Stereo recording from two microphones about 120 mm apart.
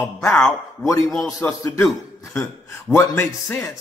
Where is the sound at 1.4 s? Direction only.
15° left (ahead or behind).